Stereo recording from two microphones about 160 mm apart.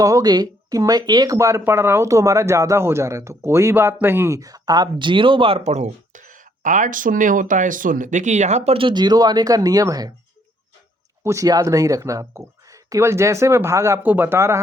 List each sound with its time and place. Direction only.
0.0 s speech: 20° right (ahead or behind)
11.2 s speech: 20° right (ahead or behind)